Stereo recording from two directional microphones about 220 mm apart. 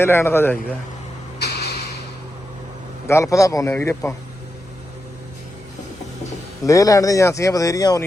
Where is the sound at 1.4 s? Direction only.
45° left (ahead or behind).